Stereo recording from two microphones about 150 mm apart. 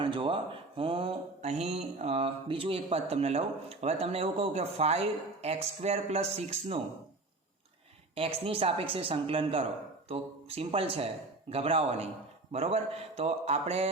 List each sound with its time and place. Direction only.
0.0 s speech: 35° right (ahead or behind)
0.8 s mantra: 35° right (ahead or behind)
8.1 s a man's voice: 40° right (ahead or behind)
12.5 s mantra: 45° right (ahead or behind)